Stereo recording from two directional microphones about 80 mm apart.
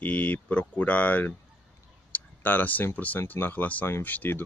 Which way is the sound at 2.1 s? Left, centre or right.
Left.